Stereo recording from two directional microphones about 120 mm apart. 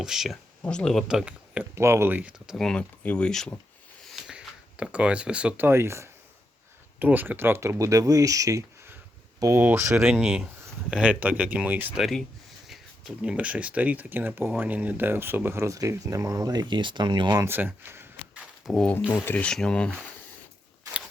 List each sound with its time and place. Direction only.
0.0 s speech: 5° right (ahead or behind)
0.6 s speech: 10° left (ahead or behind)
1.0 s speech: 10° right (ahead or behind)
1.7 s speech: 20° right (ahead or behind)
2.6 s speech: 5° left (ahead or behind); by 9.9 s 20° right (ahead or behind)
9.9 s speech: 5° right (ahead or behind)
12.6 s speech: 5° right (ahead or behind); by 17.4 s 40° right (ahead or behind)
17.4 s speech: 15° right (ahead or behind)
18.7 s speech: 5° left (ahead or behind)